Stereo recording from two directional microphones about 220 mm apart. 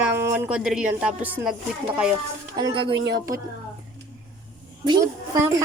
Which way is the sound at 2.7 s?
25° right (ahead or behind).